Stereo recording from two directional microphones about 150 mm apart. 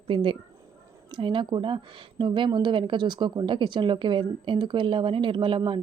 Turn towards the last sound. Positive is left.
turn(degrees=-35)  # may be behind; listen again after turning